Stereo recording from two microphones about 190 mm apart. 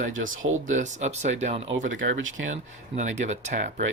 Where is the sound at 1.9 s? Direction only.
90° right.